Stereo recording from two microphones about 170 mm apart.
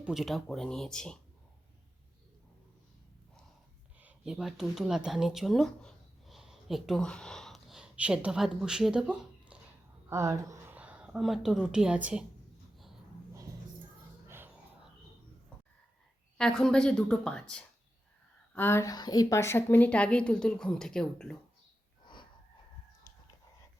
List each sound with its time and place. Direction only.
0.0 s speech: centre (ahead or behind)
4.0 s speech: 5° right (ahead or behind)
10.1 s a woman's voice: 15° right (ahead or behind)
10.8 s a woman's voice: 5° right (ahead or behind)
14.3 s music: 15° right (ahead or behind)
16.4 s speech: 5° left (ahead or behind)
22.0 s a sound: 25° left (ahead or behind)